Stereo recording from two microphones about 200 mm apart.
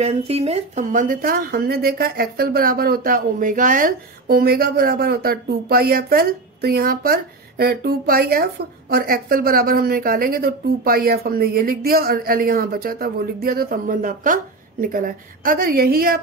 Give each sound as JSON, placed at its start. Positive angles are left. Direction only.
{"t": 0.0, "sound": "a woman's voice", "side_deg": -30}